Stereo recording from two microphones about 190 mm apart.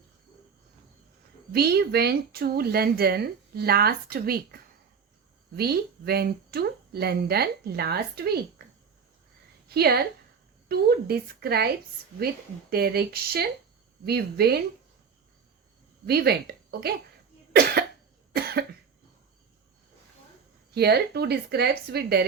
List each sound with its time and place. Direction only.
1.5 s speech: 55° right (ahead or behind)
9.6 s a woman's voice: 55° right (ahead or behind)
12.7 s speech: 55° right (ahead or behind)
16.0 s speech: 55° right (ahead or behind)
18.3 s cough: 55° right (ahead or behind)
20.7 s speech: 60° right (ahead or behind)